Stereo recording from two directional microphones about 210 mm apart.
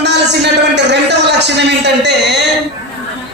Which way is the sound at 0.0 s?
55° right (ahead or behind).